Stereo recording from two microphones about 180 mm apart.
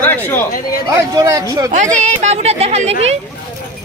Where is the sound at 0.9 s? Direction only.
20° right (ahead or behind).